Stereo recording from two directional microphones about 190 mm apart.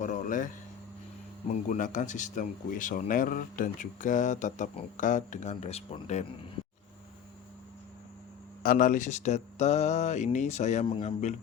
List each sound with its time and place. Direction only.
0.0 s a sound: 40° left (ahead or behind)
1.6 s speech: 40° left (ahead or behind)
8.6 s speech: 45° left (ahead or behind)